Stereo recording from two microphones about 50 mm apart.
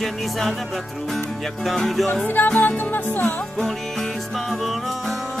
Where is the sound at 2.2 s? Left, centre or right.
Left.